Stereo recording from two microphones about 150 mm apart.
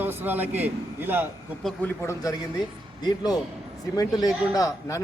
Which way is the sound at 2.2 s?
25° left (ahead or behind).